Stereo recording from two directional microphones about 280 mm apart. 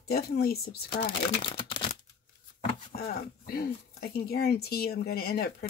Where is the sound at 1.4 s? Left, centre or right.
Centre.